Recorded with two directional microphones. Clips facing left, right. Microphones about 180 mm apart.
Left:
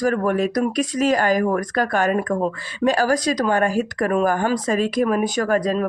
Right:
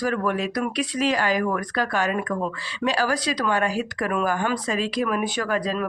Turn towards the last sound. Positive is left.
turn(degrees=45)  # may be behind; listen again after turning